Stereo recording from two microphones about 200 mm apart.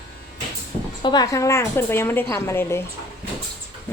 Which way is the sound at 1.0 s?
20° left (ahead or behind).